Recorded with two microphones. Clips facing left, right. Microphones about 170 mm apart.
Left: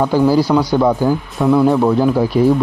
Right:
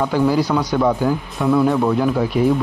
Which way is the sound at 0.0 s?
30° left (ahead or behind).